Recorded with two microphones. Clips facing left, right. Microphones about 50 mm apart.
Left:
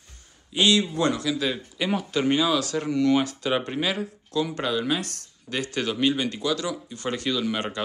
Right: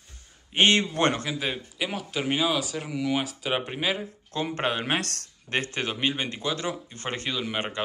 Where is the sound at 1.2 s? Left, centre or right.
Right.